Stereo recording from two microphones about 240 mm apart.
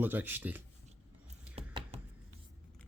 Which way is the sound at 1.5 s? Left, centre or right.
Right.